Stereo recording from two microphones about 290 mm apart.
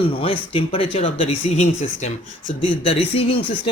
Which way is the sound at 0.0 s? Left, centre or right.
Centre.